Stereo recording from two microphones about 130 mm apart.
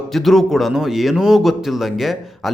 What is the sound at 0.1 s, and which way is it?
Speech, centre (ahead or behind).